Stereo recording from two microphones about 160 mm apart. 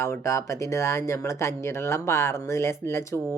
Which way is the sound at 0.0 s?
20° left (ahead or behind).